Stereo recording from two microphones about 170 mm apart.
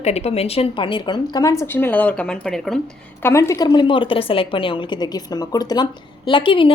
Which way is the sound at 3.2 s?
15° left (ahead or behind).